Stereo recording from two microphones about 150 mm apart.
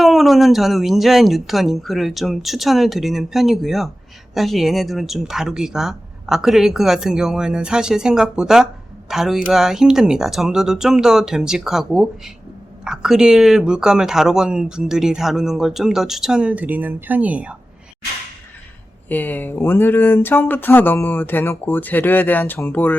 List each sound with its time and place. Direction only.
0.0 s speech: centre (ahead or behind)
19.0 s speech: 10° left (ahead or behind)